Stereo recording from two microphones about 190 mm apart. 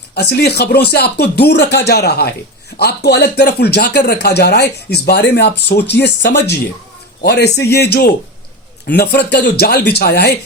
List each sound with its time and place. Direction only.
0.1 s speech: 55° left (ahead or behind)